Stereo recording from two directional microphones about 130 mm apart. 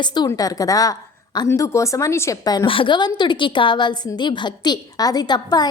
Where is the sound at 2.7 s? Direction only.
40° left (ahead or behind).